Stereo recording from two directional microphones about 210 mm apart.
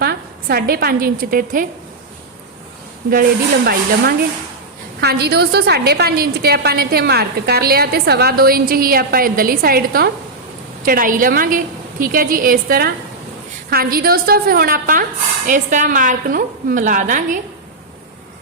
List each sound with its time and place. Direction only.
0.0 s a woman's voice: 50° right (ahead or behind)
3.1 s a woman's voice: 45° right (ahead or behind)